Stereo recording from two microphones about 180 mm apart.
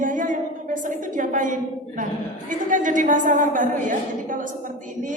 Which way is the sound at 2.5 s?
45° right (ahead or behind).